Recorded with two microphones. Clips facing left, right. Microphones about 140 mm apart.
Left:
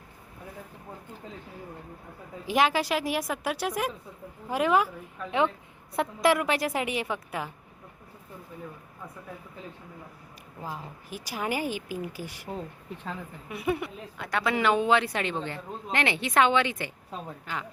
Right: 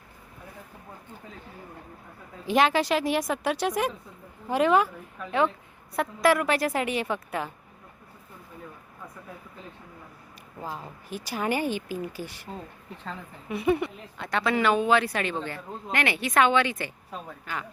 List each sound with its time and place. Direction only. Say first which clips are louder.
2.5 s a woman's voice: right 2 dB; 10° left (ahead or behind)
11.1 s a woman's voice: right 3 dB; 10° left (ahead or behind)